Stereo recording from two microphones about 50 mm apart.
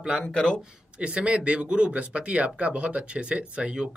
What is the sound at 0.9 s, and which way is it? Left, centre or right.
Speech, right.